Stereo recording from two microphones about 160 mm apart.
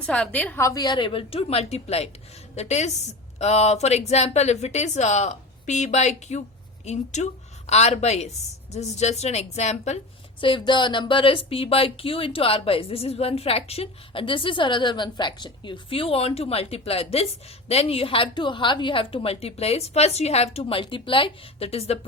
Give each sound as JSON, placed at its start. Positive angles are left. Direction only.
{"t": 0.0, "sound": "a woman's voice", "side_deg": 5}
{"t": 10.4, "sound": "speech", "side_deg": 30}